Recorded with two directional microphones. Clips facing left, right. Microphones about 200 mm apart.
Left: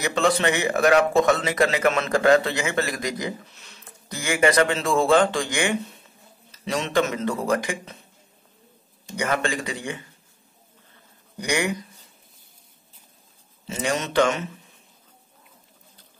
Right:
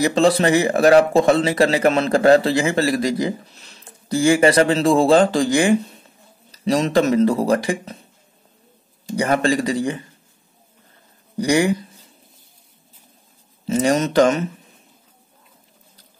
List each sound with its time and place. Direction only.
0.0 s speech: 35° right (ahead or behind)
9.0 s speech: 35° right (ahead or behind)
11.3 s speech: 35° right (ahead or behind)
13.7 s speech: 40° right (ahead or behind)